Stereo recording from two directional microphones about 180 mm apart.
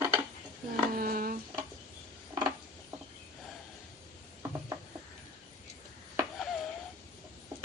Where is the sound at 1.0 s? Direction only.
55° right (ahead or behind).